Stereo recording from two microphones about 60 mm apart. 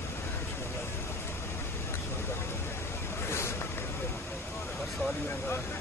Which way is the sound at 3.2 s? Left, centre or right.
Left.